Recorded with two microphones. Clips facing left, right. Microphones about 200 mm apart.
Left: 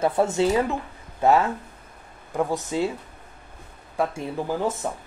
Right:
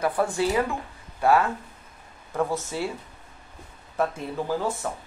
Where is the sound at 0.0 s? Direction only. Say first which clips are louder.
Left 3 dB; 25° left (ahead or behind).